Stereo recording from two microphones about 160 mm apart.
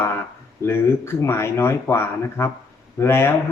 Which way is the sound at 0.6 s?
15° left (ahead or behind).